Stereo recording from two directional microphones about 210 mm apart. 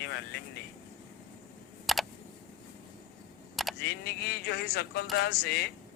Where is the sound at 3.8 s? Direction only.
50° left (ahead or behind).